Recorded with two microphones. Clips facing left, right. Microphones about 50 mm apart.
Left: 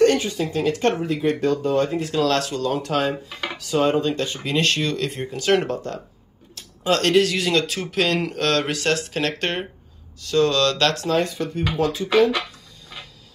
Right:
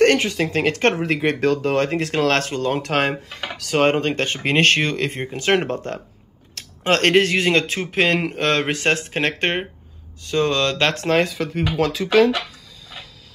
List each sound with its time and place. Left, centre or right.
0.0 s speech: right
2.1 s speech: right
2.8 s speech: right
6.5 s speech: right
11.1 s speech: right